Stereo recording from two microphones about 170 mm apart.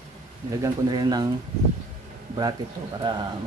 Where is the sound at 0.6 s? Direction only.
25° right (ahead or behind).